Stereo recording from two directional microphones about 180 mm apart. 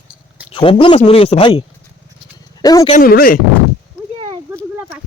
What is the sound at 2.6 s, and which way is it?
Speech, 20° left (ahead or behind).